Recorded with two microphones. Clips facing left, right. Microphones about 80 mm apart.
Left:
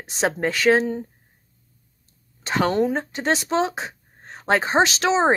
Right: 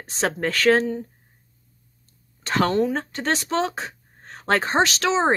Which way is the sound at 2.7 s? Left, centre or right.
Left.